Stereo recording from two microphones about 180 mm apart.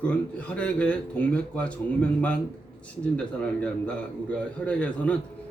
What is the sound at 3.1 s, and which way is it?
A man's voice, 5° left (ahead or behind).